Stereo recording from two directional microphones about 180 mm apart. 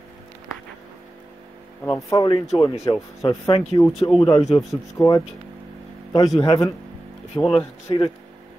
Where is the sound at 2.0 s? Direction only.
20° left (ahead or behind).